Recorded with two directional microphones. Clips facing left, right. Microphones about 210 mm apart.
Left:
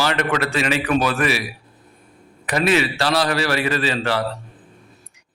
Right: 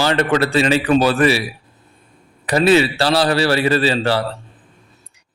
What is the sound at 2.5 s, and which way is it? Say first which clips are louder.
A man's voice: right 5 dB; 30° right (ahead or behind).